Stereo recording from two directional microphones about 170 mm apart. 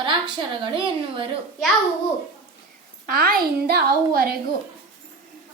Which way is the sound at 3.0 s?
60° right (ahead or behind).